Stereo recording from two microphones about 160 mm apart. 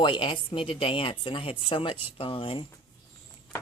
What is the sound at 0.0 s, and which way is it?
Speech, 30° left (ahead or behind).